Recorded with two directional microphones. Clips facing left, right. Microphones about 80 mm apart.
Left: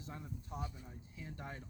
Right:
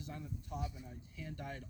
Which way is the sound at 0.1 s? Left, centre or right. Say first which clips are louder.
Right 1 dB; left.